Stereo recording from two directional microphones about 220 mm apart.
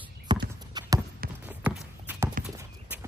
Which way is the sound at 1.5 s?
10° right (ahead or behind).